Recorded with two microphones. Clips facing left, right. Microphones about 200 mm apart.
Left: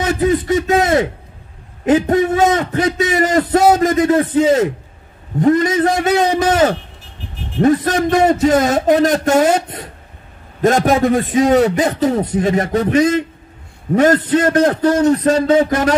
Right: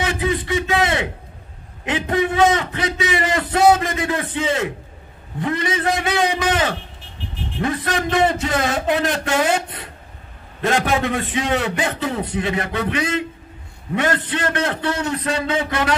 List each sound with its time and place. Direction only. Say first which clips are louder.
0.0 s a man's voice: left 6 dB; 40° left (ahead or behind)